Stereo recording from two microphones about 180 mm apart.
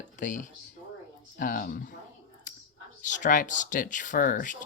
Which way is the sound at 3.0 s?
45° left (ahead or behind).